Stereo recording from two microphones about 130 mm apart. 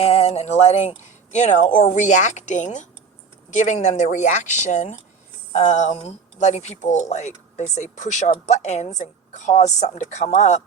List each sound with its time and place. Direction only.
0.0 s speech: 55° left (ahead or behind)